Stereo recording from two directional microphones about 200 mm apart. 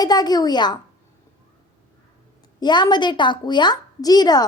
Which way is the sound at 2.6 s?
20° left (ahead or behind).